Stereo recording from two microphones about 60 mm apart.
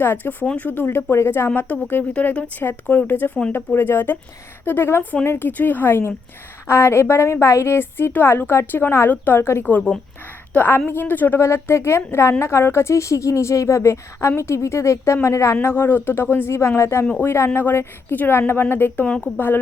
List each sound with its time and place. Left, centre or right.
0.0 s speech: left
0.4 s a woman's voice: left
0.7 s a woman's voice: left
1.5 s a woman's voice: left
3.1 s a woman's voice: left
11.3 s a woman's voice: left
15.6 s speech: left
19.0 s a woman's voice: centre